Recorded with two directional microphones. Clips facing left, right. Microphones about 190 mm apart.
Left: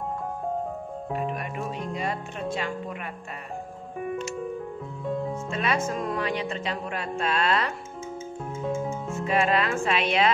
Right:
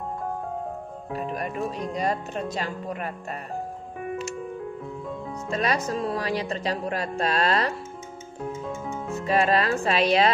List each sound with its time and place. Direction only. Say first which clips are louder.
1.1 s speech: right 1 dB; 40° right (ahead or behind)
5.5 s speech: right 3 dB; 40° right (ahead or behind)
9.1 s speech: right 2 dB; 35° right (ahead or behind)